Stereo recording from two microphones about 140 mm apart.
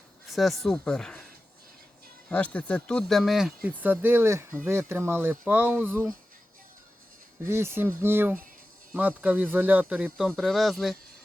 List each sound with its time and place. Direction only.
0.3 s speech: centre (ahead or behind)
2.3 s speech: 10° left (ahead or behind); by 6.1 s 15° right (ahead or behind)
7.4 s speech: 15° right (ahead or behind); by 10.9 s centre (ahead or behind)